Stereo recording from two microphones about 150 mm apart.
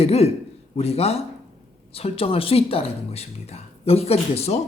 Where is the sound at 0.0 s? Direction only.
45° left (ahead or behind).